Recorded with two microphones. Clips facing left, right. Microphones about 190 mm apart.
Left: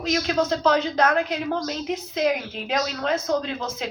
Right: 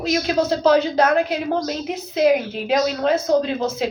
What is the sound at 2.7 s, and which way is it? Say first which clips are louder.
Speech: right 6 dB; 30° right (ahead or behind).